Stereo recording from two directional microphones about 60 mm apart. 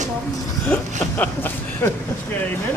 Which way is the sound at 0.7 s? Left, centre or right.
Left.